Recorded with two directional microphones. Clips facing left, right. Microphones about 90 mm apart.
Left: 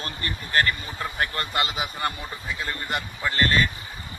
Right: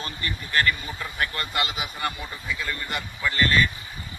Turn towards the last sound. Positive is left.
turn(degrees=40)  # may be behind; listen again after turning